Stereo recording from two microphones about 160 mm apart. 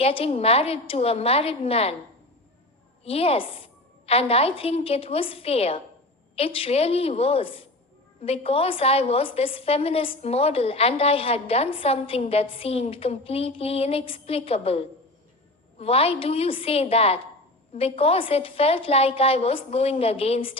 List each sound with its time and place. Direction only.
0.0 s a woman's voice: 35° left (ahead or behind)
3.0 s a woman's voice: 35° left (ahead or behind)